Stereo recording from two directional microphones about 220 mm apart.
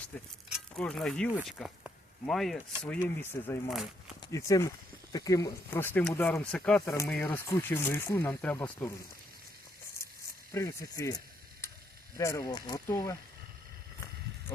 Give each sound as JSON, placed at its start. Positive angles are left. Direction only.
{"t": 0.1, "sound": "speech", "side_deg": 10}
{"t": 4.3, "sound": "speech", "side_deg": 15}
{"t": 10.5, "sound": "speech", "side_deg": 15}
{"t": 11.6, "sound": "sizzle", "side_deg": 10}
{"t": 12.1, "sound": "speech", "side_deg": 15}